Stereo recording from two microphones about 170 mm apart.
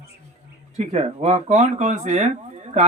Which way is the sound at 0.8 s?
45° right (ahead or behind).